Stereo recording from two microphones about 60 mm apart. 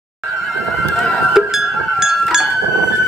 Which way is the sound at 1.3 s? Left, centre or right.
Centre.